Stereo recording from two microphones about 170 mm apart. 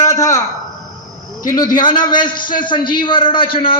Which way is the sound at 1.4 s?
20° left (ahead or behind).